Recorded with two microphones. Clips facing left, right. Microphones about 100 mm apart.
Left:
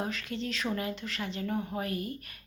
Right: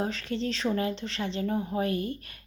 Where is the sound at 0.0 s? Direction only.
30° right (ahead or behind).